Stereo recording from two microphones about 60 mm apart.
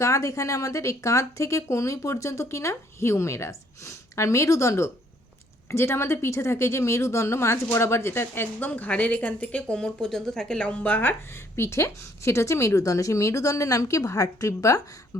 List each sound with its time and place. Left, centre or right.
0.0 s speech: left
5.6 s speech: left
8.5 s speech: left
9.7 s speech: centre; by 11.1 s left
11.5 s speech: left
15.1 s a sound: left